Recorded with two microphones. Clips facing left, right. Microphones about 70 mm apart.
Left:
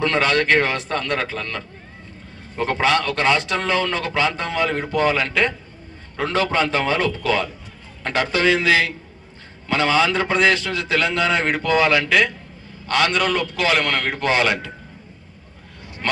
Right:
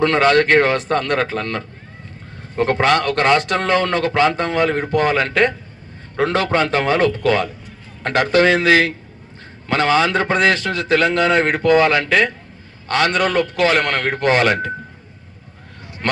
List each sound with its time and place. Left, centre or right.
0.0 s a man's voice: right
2.8 s a man's voice: right